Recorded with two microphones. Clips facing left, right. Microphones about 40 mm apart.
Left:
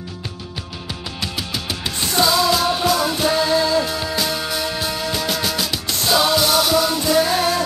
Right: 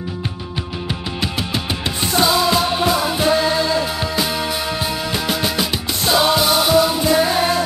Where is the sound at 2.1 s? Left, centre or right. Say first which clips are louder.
Right 1 dB; centre.